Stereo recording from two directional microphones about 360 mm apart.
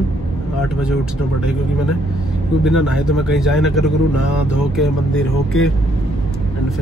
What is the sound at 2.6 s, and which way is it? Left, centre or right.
Speech, centre.